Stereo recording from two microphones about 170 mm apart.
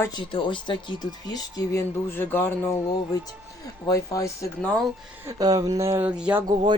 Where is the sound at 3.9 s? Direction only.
20° left (ahead or behind).